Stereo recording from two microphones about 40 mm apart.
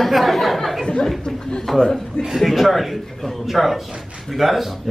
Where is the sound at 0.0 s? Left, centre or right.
Centre.